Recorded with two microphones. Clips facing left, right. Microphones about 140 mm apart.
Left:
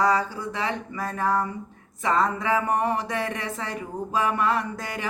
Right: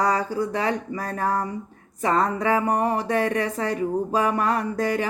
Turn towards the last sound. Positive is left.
turn(degrees=-35)  # may be behind; listen again after turning